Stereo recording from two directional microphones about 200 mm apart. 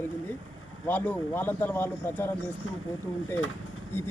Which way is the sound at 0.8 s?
10° left (ahead or behind).